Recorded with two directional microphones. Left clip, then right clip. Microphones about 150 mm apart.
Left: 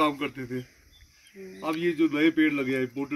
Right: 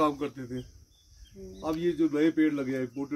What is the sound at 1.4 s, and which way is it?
Speech, 5° left (ahead or behind).